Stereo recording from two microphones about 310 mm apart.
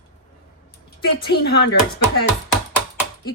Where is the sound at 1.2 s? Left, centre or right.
Left.